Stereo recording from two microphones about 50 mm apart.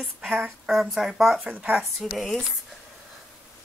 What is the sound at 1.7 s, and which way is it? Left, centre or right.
Speech, centre.